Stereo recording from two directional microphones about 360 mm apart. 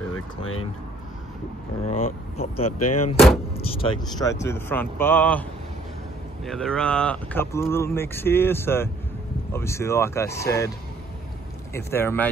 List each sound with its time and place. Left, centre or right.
1.9 s speech: centre
2.8 s speech: left
3.5 s speech: centre
11.7 s speech: centre